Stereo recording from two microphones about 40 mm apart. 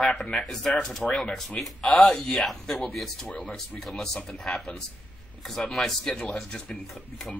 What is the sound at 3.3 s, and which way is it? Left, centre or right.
Speech, left.